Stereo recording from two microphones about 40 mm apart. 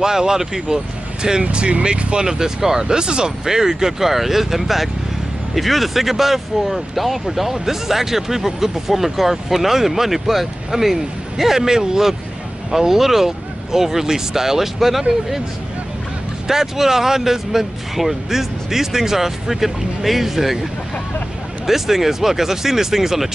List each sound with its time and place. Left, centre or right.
0.0 s speech: centre
1.4 s speech: right; by 15.0 s centre
16.4 s speech: centre
21.6 s speech: centre